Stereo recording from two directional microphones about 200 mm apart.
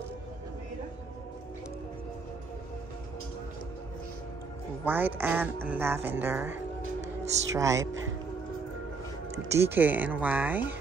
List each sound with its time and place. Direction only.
4.8 s speech: 10° right (ahead or behind)
9.5 s speech: 10° right (ahead or behind)